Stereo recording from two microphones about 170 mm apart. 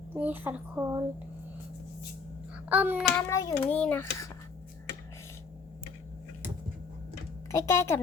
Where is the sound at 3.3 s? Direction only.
20° left (ahead or behind).